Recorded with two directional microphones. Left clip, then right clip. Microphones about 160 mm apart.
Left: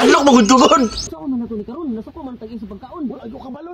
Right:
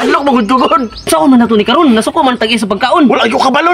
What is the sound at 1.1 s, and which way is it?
Speech, 85° right.